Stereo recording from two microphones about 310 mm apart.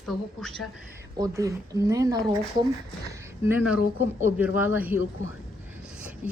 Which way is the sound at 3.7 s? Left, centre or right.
Left.